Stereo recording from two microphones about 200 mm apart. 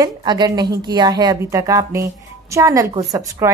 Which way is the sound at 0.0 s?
20° right (ahead or behind).